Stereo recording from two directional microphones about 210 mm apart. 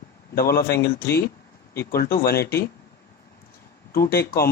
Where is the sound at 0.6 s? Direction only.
50° left (ahead or behind).